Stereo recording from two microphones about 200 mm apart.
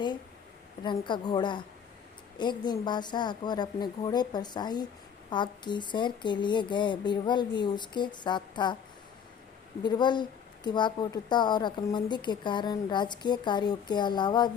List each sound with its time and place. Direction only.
0.9 s a woman's voice: 25° left (ahead or behind)
9.8 s a woman's voice: 20° left (ahead or behind)